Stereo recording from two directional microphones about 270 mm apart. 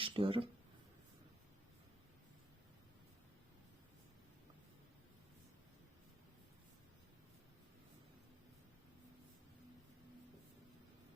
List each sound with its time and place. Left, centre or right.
0.0 s speech: centre